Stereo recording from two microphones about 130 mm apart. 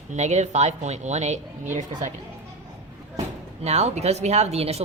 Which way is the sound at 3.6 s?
55° right (ahead or behind).